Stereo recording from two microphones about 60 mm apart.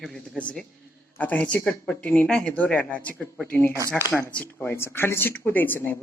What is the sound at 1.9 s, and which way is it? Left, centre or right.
Speech, centre.